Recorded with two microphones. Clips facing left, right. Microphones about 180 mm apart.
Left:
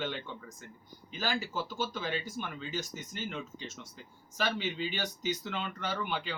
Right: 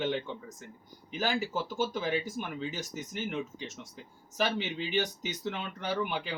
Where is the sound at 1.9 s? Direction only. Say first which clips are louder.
Right 4 dB; 15° right (ahead or behind).